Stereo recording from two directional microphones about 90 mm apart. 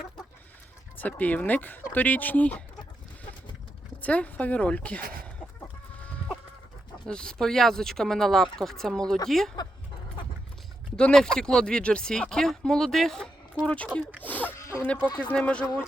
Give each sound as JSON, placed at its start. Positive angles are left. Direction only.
{"t": 0.9, "sound": "speech", "side_deg": 15}
{"t": 4.0, "sound": "speech", "side_deg": 15}
{"t": 7.1, "sound": "speech", "side_deg": 10}
{"t": 10.9, "sound": "speech", "side_deg": 5}
{"t": 14.2, "sound": "a sound", "side_deg": 20}
{"t": 14.5, "sound": "a sound", "side_deg": 30}
{"t": 15.3, "sound": "speech", "side_deg": 15}